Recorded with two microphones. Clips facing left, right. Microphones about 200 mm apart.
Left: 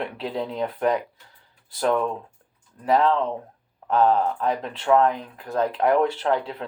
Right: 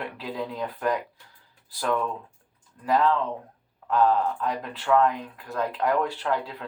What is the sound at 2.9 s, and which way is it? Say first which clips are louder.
Speech: left 2 dB; 25° left (ahead or behind).